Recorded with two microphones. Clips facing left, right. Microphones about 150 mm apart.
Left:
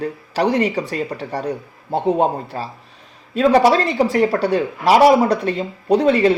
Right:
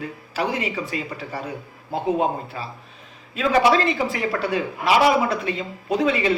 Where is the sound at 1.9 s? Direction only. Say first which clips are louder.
Left 5 dB; 35° left (ahead or behind).